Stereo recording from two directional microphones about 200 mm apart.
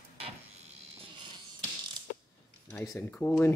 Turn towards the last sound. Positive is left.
turn(degrees=10)  # may be behind; listen again after turning